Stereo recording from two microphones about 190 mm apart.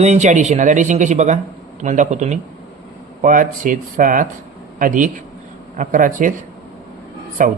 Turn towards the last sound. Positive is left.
turn(degrees=-45)  # may be behind; listen again after turning